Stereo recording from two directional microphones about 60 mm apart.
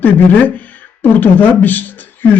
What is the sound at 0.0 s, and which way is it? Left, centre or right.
A man's voice, left.